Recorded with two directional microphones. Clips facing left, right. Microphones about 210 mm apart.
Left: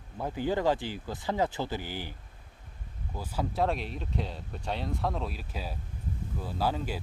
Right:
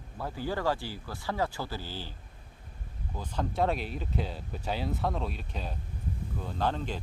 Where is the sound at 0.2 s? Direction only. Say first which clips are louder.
Left 4 dB; 20° left (ahead or behind).